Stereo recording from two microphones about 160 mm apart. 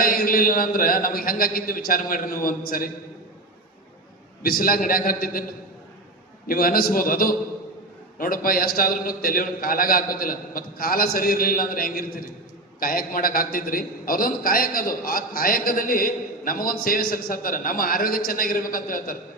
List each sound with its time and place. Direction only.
0.0 s a man's voice: 65° left (ahead or behind)
4.4 s a man's voice: 65° left (ahead or behind)
6.5 s a man's voice: 65° left (ahead or behind)